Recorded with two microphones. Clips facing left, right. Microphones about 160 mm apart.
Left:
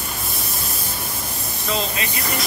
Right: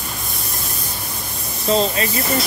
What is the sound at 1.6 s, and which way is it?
Speech, 35° right (ahead or behind).